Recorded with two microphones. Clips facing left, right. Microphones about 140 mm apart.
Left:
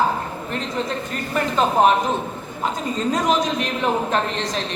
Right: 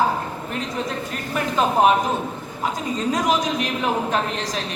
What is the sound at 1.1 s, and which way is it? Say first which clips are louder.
Speech: left 2 dB; 5° right (ahead or behind).